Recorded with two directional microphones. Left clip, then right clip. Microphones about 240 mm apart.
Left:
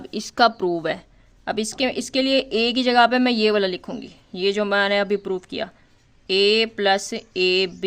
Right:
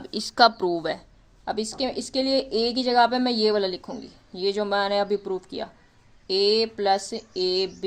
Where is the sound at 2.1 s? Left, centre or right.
Left.